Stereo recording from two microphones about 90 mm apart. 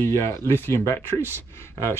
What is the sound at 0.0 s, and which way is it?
Speech, 30° left (ahead or behind).